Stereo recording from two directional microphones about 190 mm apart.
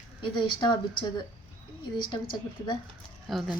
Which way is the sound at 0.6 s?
25° left (ahead or behind).